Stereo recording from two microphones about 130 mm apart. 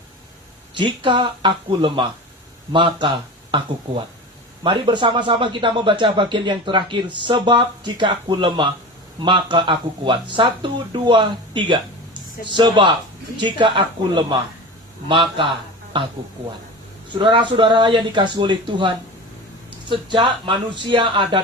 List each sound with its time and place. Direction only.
0.7 s speech: 40° right (ahead or behind)
17.2 s speech: 40° right (ahead or behind)